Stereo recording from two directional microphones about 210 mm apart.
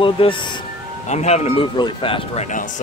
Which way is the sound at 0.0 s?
25° left (ahead or behind).